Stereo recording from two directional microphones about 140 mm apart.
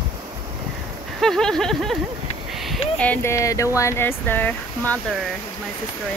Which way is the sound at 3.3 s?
20° left (ahead or behind).